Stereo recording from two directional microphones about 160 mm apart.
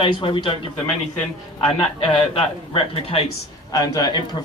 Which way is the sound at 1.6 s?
30° left (ahead or behind).